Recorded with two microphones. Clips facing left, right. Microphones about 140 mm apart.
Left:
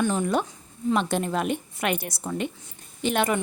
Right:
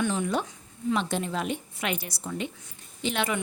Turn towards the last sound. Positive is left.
turn(degrees=45)  # may be behind; listen again after turning